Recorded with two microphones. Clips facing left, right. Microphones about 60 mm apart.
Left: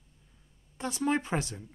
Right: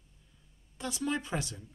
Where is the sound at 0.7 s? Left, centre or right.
Left.